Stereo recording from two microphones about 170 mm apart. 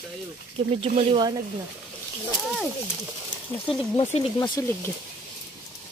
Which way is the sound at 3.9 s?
30° left (ahead or behind).